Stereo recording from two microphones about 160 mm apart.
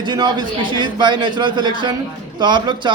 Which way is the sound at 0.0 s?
30° right (ahead or behind).